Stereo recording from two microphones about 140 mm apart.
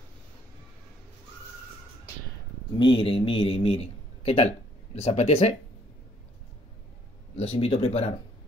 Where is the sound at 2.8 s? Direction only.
35° left (ahead or behind).